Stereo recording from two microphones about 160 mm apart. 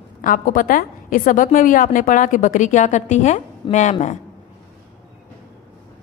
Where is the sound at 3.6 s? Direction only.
30° left (ahead or behind).